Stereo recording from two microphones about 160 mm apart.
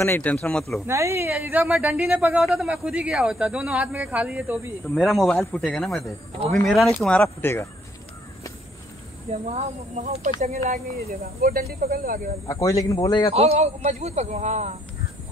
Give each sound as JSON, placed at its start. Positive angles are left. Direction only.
{"t": 0.0, "sound": "speech", "side_deg": 10}
{"t": 0.8, "sound": "speech", "side_deg": -15}
{"t": 9.5, "sound": "speech", "side_deg": -50}
{"t": 11.4, "sound": "speech", "side_deg": -70}
{"t": 12.4, "sound": "a man's voice", "side_deg": 20}
{"t": 13.3, "sound": "speech", "side_deg": -40}